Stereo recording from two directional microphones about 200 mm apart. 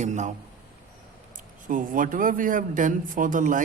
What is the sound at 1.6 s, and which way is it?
A man's voice, 40° right (ahead or behind).